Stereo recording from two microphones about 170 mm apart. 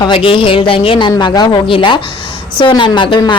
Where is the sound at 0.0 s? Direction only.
30° left (ahead or behind).